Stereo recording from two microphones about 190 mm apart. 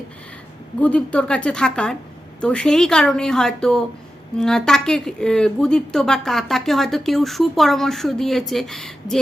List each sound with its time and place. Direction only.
0.8 s speech: 5° left (ahead or behind)